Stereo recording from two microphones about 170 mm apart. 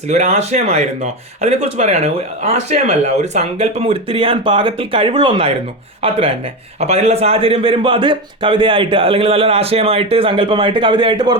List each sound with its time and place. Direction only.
0.1 s a man's voice: 40° right (ahead or behind)